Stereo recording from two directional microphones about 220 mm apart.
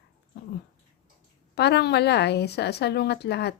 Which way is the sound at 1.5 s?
50° left (ahead or behind).